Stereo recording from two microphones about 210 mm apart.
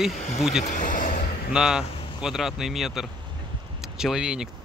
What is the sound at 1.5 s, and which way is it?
Speech, 5° right (ahead or behind).